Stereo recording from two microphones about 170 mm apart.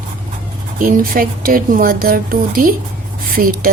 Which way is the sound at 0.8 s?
55° right (ahead or behind).